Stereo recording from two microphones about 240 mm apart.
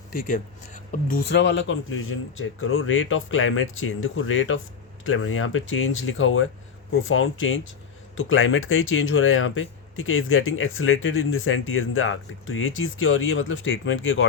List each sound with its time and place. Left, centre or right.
0.1 s speech: left